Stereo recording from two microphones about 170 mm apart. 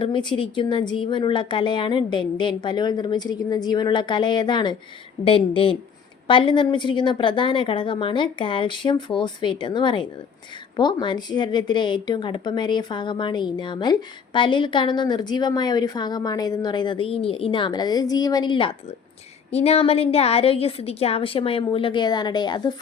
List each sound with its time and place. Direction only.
0.0 s a woman's voice: 30° left (ahead or behind)